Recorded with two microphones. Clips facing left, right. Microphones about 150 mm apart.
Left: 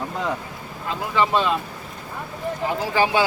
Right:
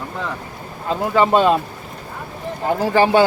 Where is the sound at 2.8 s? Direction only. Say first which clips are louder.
Right 6 dB; 45° right (ahead or behind).